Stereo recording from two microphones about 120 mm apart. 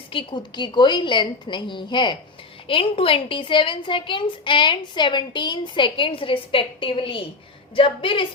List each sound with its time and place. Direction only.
0.1 s a woman's voice: 45° left (ahead or behind)